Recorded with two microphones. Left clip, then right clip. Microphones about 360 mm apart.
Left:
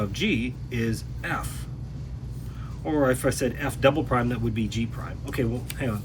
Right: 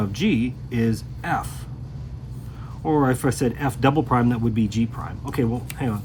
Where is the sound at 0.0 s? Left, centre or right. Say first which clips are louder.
Right 3 dB; centre.